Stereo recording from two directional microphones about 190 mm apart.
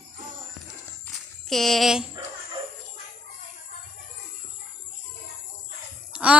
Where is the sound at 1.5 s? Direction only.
Centre (ahead or behind).